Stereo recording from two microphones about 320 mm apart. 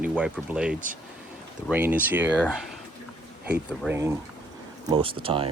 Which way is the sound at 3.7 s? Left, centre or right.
Centre.